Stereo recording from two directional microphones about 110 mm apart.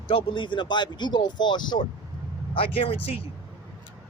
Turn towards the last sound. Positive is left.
turn(degrees=55)  # may be behind; listen again after turning